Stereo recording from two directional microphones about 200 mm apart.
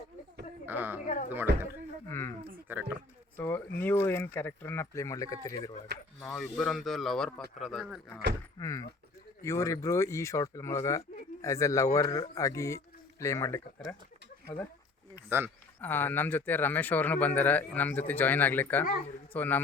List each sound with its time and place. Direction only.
0.6 s speech: 10° right (ahead or behind)
1.0 s speech: 40° left (ahead or behind)
2.0 s a sound: 15° left (ahead or behind)
2.7 s speech: 10° right (ahead or behind)
3.3 s a sound: 10° left (ahead or behind)
3.8 s speech: 10° left (ahead or behind)
5.9 s speech: 55° right (ahead or behind)
6.2 s speech: 5° left (ahead or behind)
8.5 s speech: 15° left (ahead or behind)
15.1 s a sound: 10° right (ahead or behind)
15.8 s speech: 10° left (ahead or behind)